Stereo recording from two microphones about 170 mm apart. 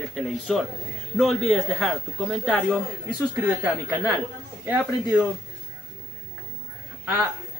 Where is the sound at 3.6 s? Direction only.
10° right (ahead or behind).